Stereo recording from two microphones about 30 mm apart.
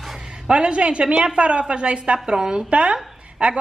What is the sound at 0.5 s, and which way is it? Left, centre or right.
A woman's voice, right.